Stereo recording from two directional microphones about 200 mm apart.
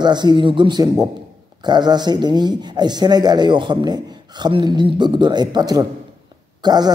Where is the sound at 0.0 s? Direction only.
20° right (ahead or behind).